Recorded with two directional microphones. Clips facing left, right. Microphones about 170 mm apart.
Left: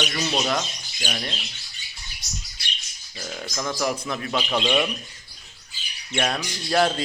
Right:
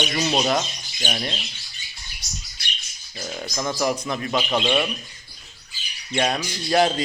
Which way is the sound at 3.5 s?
15° right (ahead or behind).